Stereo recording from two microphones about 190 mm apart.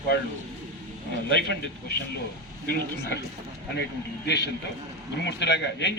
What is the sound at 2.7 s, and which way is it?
A man's voice, 60° left (ahead or behind).